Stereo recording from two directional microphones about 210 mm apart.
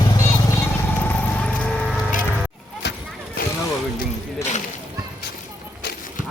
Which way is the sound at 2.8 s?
55° left (ahead or behind).